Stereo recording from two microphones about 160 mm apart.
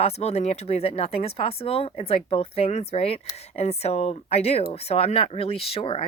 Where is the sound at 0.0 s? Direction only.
40° left (ahead or behind).